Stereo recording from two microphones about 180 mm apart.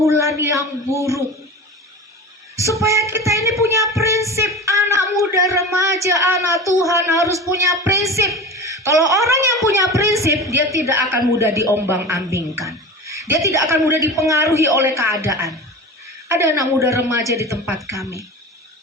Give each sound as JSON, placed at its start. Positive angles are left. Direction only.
{"t": 0.0, "sound": "a man's voice", "side_deg": -15}
{"t": 2.6, "sound": "speech", "side_deg": -15}
{"t": 4.0, "sound": "music", "side_deg": -15}
{"t": 5.3, "sound": "a sound", "side_deg": -15}
{"t": 6.7, "sound": "a man's voice", "side_deg": -15}